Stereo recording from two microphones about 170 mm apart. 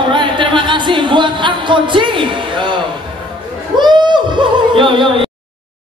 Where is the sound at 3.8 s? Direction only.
25° right (ahead or behind).